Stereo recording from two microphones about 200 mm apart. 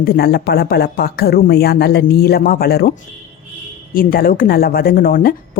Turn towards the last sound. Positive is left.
turn(degrees=45)  # may be behind; listen again after turning